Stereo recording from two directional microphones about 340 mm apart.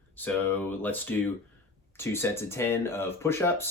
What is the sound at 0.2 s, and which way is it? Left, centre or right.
Speech, centre.